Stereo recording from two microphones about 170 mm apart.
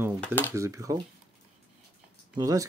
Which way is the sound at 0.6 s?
20° right (ahead or behind).